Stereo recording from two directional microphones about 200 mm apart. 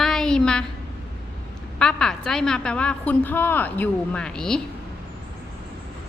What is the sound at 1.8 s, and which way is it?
A woman's voice, 5° left (ahead or behind).